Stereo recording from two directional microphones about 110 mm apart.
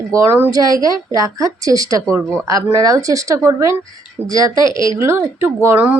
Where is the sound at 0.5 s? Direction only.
35° right (ahead or behind).